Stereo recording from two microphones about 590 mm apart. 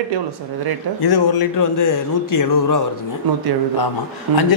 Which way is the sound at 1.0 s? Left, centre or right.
Left.